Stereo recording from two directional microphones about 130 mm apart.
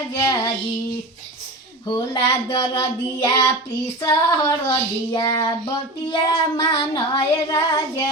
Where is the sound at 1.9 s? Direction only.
35° left (ahead or behind).